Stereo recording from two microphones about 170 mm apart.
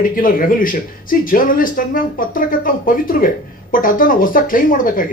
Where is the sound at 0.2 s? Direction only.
55° left (ahead or behind).